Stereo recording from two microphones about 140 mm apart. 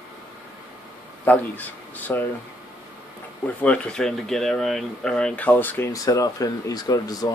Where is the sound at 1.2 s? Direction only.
10° left (ahead or behind).